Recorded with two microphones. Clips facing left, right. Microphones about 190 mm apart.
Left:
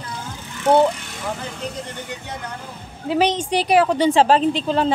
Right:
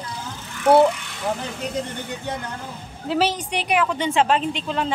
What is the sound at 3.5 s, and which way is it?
A woman's voice, 35° left (ahead or behind).